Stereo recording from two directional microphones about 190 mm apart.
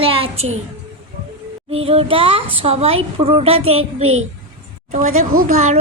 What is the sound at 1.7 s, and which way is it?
A woman's voice, 30° right (ahead or behind).